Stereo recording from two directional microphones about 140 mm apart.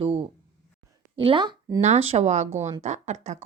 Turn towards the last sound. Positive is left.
turn(degrees=-55)  # may be behind; listen again after turning